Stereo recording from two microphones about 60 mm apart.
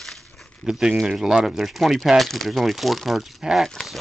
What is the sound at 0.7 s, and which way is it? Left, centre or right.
Speech, centre.